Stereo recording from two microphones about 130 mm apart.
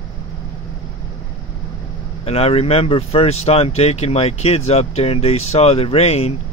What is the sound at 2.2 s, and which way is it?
Speech, 50° left (ahead or behind).